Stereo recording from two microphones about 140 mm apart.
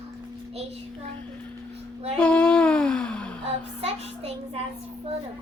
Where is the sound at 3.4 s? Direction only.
45° right (ahead or behind).